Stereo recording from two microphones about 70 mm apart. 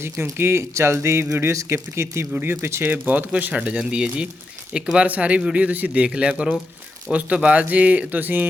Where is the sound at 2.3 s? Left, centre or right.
Right.